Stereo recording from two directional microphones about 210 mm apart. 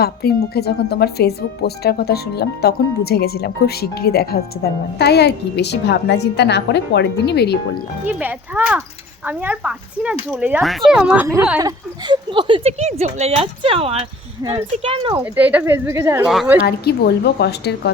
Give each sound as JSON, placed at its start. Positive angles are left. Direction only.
{"t": 0.0, "sound": "speech", "side_deg": 50}
{"t": 8.0, "sound": "speech", "side_deg": -10}
{"t": 12.0, "sound": "speech", "side_deg": -20}
{"t": 15.2, "sound": "speech", "side_deg": -10}
{"t": 16.2, "sound": "a woman's voice", "side_deg": 0}
{"t": 16.6, "sound": "speech", "side_deg": 50}